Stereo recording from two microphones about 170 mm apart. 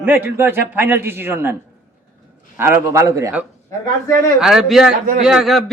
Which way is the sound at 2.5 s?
10° right (ahead or behind).